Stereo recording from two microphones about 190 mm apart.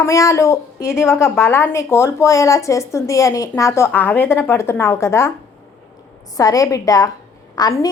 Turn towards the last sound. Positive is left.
turn(degrees=20)  # may be behind; listen again after turning